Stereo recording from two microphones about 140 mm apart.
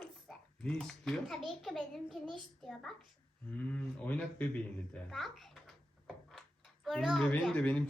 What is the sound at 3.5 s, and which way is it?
A child's voice, 10° left (ahead or behind).